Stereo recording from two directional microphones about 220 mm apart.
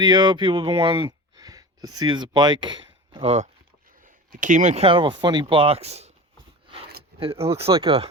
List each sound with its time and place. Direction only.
0.0 s speech: 20° right (ahead or behind)
7.3 s speech: 10° right (ahead or behind)